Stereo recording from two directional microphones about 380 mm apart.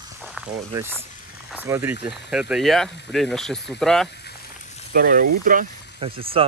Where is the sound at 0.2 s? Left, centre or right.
Centre.